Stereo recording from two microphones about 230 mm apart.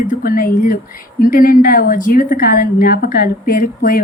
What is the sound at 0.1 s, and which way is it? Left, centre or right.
Speech, left.